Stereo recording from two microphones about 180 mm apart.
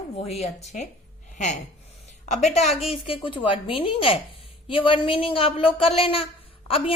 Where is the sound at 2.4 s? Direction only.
35° left (ahead or behind).